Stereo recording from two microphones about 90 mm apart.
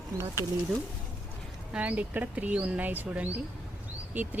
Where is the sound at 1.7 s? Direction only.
15° right (ahead or behind).